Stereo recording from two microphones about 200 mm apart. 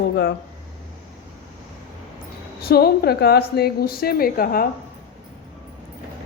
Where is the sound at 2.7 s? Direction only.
50° left (ahead or behind).